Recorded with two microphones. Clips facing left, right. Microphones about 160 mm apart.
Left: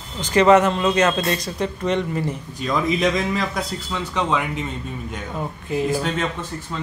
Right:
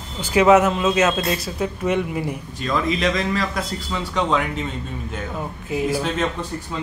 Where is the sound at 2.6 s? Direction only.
10° left (ahead or behind).